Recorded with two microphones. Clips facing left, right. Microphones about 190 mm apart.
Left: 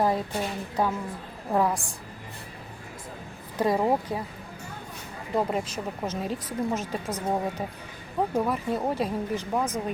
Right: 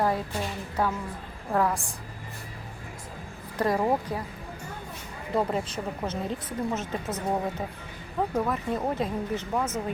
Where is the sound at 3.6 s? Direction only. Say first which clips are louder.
Left 1 dB; 10° left (ahead or behind).